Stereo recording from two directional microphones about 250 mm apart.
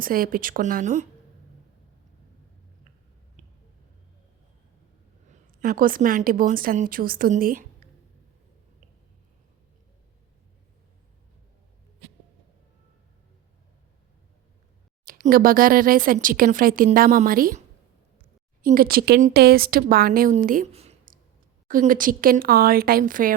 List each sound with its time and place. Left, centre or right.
0.0 s speech: right
3.4 s a sound: right
5.3 s speech: right
15.0 s speech: right
18.6 s speech: right